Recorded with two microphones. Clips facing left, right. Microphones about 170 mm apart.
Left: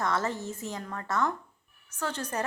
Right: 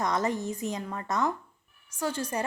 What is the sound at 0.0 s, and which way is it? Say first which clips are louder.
A woman's voice: right 2 dB; 15° right (ahead or behind).